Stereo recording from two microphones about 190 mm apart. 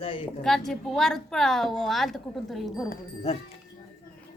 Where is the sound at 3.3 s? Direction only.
35° left (ahead or behind).